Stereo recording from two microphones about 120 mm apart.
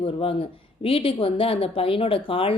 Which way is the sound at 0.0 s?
50° left (ahead or behind).